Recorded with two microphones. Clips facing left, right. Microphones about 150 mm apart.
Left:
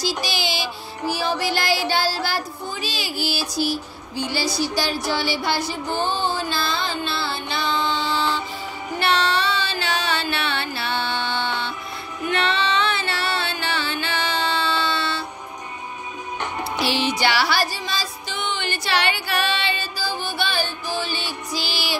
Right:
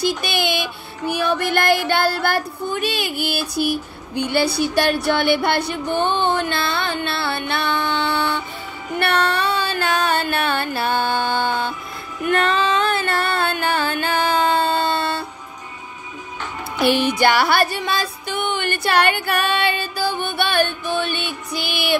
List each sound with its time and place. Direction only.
0.0 s music: 60° right (ahead or behind)
12.3 s female singing: 45° right (ahead or behind)
16.8 s music: 55° right (ahead or behind)